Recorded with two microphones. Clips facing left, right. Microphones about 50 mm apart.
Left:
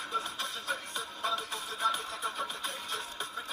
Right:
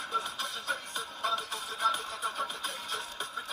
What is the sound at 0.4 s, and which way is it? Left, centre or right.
Music, left.